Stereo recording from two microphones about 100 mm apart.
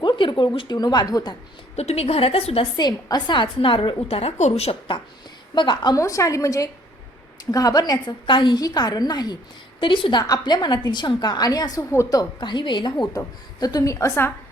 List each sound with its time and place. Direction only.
0.0 s speech: 50° left (ahead or behind)
0.8 s a woman's voice: 40° left (ahead or behind)
1.7 s a woman's voice: 90° left
2.7 s a woman's voice: 45° left (ahead or behind); by 4.8 s 90° left
5.5 s a woman's voice: 50° left (ahead or behind)
6.0 s a woman's voice: 35° left (ahead or behind)
9.8 s a woman's voice: 55° left (ahead or behind); by 12.2 s 35° left (ahead or behind)
12.4 s a woman's voice: 50° left (ahead or behind); by 14.3 s 25° left (ahead or behind)